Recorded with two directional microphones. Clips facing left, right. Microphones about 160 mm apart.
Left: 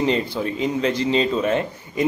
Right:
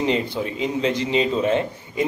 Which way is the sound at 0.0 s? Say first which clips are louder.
Left 1 dB; 20° right (ahead or behind).